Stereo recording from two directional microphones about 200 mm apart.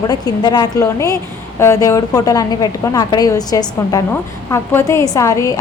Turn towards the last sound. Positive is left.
turn(degrees=15)  # may be behind; listen again after turning